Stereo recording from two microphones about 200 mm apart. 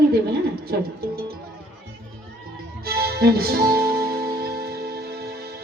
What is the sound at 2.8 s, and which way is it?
Music, 50° right (ahead or behind).